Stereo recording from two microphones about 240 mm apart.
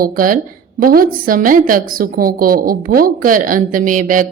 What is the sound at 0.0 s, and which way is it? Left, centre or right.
A woman's voice, right.